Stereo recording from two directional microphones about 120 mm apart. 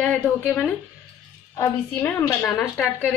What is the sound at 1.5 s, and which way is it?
A woman's voice, 25° left (ahead or behind).